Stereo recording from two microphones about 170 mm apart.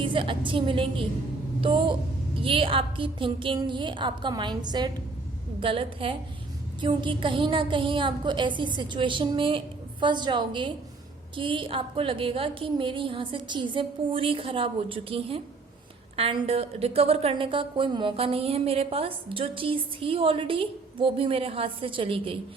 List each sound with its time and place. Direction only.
0.0 s a woman's voice: 30° right (ahead or behind)